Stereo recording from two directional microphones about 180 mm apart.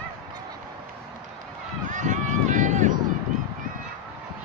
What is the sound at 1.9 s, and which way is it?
Run, 45° right (ahead or behind).